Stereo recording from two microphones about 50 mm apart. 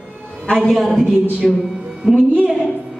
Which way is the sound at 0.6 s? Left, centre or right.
Centre.